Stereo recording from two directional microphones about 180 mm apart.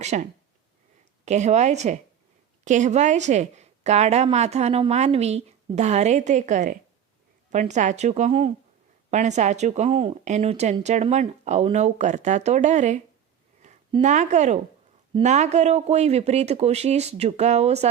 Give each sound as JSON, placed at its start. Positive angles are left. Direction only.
{"t": 0.0, "sound": "a woman's voice", "side_deg": -40}
{"t": 14.0, "sound": "a woman's voice", "side_deg": -40}